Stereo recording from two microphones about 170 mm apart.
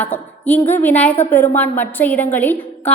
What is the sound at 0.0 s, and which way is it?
A woman's voice, 10° left (ahead or behind).